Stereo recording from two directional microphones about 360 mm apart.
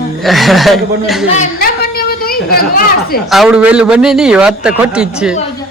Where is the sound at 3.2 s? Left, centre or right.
Centre.